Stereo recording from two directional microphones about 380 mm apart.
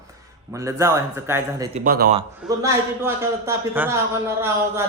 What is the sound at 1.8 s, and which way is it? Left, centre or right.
Speech, right.